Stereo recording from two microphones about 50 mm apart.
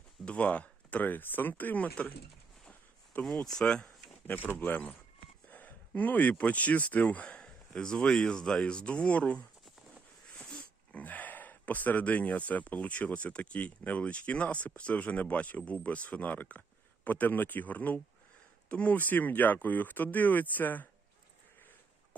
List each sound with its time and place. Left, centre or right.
0.3 s speech: left
2.6 s a sound: left
3.2 s speech: centre
4.3 s speech: left
10.4 s dog: left
11.0 s speech: left